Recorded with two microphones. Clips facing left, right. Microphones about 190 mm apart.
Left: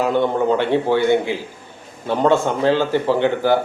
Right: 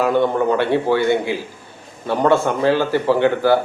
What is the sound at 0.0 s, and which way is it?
A man's voice, 15° left (ahead or behind).